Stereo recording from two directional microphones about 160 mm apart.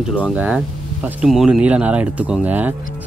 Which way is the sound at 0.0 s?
5° right (ahead or behind).